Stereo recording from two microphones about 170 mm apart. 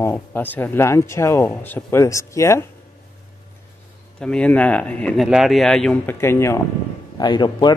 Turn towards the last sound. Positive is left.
turn(degrees=25)  # may be behind; listen again after turning